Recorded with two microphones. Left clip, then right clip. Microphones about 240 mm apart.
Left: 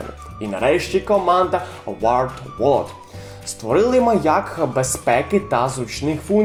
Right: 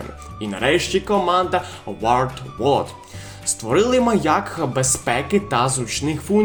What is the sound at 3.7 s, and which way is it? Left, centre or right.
Speech, right.